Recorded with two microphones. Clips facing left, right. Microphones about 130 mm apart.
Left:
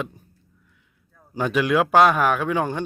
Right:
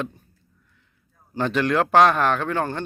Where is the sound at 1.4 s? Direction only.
10° left (ahead or behind).